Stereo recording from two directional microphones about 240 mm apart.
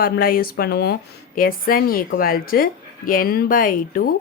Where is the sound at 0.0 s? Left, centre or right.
Left.